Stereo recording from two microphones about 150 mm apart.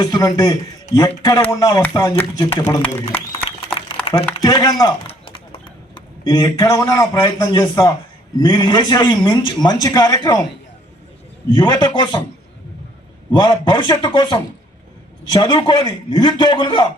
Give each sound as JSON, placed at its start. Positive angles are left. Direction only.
{"t": 0.0, "sound": "a man's voice", "side_deg": 25}
{"t": 2.6, "sound": "a man's voice", "side_deg": 10}
{"t": 4.0, "sound": "a sound", "side_deg": 40}
{"t": 4.4, "sound": "a man's voice", "side_deg": 25}
{"t": 5.0, "sound": "clip-clop", "side_deg": 40}
{"t": 6.2, "sound": "a man's voice", "side_deg": 25}
{"t": 11.5, "sound": "a man's voice", "side_deg": 30}
{"t": 13.3, "sound": "a man's voice", "side_deg": 30}